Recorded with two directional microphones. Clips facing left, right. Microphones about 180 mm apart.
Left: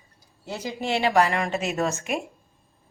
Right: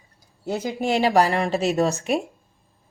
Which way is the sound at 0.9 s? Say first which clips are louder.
Right 2 dB; 35° right (ahead or behind).